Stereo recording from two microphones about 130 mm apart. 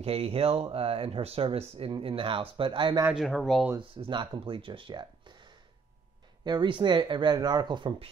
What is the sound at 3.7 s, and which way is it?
Speech, 40° right (ahead or behind).